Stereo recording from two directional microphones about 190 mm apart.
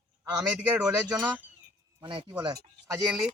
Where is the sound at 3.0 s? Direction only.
5° right (ahead or behind).